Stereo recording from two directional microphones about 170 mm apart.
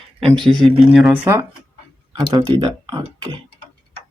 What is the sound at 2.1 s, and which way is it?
Speech, 25° right (ahead or behind).